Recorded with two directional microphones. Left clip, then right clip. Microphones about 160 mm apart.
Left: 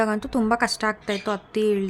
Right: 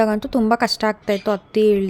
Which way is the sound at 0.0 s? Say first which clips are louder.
Right 5 dB; 25° right (ahead or behind).